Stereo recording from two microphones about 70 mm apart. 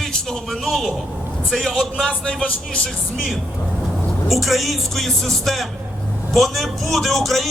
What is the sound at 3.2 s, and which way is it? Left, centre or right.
A man's voice, centre.